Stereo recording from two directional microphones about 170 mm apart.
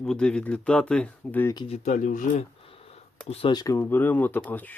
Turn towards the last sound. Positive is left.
turn(degrees=10)  # may be behind; listen again after turning